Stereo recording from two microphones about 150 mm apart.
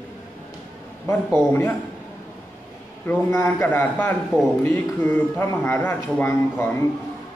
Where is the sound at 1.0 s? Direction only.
15° left (ahead or behind).